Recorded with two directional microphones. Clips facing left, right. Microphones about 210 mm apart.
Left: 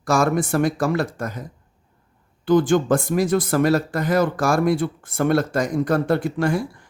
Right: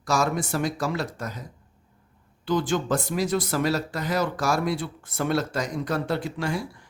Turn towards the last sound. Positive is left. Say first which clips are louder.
# left 7 dB
turn(degrees=50)  # may be behind; listen again after turning